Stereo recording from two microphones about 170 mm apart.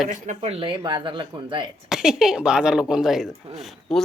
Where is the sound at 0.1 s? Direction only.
40° right (ahead or behind).